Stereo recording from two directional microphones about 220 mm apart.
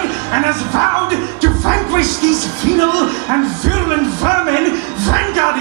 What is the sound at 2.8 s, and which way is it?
Speech, 20° right (ahead or behind).